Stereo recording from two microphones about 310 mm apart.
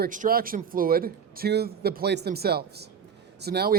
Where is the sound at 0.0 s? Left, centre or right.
Right.